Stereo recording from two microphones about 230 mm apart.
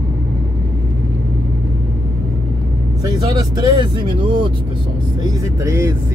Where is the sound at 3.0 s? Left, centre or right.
Centre.